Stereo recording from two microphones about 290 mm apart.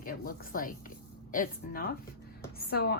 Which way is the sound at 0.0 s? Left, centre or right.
Left.